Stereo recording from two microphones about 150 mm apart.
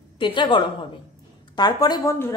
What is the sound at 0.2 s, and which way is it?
A woman's voice, 30° left (ahead or behind).